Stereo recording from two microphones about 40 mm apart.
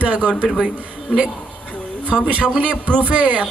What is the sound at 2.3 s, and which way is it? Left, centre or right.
Speech, right.